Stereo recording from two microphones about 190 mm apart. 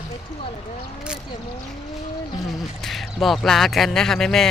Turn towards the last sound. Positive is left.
turn(degrees=0)  # may be behind; listen again after turning